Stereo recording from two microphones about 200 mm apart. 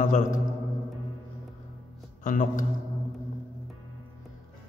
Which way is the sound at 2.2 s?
40° left (ahead or behind).